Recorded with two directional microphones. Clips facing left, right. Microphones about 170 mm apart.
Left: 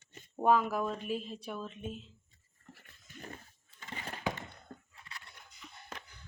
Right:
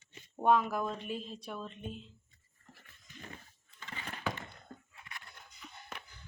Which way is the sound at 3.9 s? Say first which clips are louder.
Left 2 dB; 35° left (ahead or behind).